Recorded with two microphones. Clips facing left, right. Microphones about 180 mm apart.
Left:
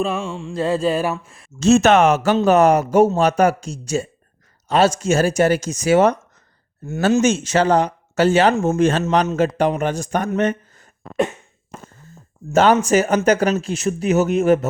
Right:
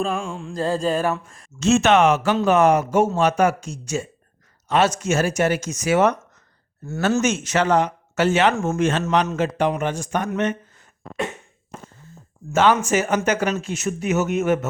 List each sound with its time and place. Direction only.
0.3 s mantra: centre (ahead or behind)
0.7 s speech: 5° left (ahead or behind)
1.5 s speech: 35° left (ahead or behind)
7.2 s speech: 30° left (ahead or behind)
10.3 s a sound: 40° left (ahead or behind)
12.5 s speech: 40° left (ahead or behind)